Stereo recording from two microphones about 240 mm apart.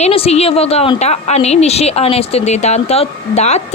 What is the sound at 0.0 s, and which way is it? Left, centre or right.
A woman's voice, left.